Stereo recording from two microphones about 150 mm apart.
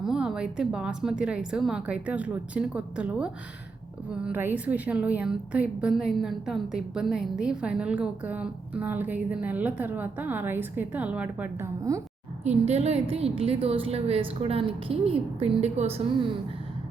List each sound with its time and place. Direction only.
0.0 s a woman's voice: 5° right (ahead or behind); by 12.0 s 20° right (ahead or behind)
12.5 s a woman's voice: 45° right (ahead or behind)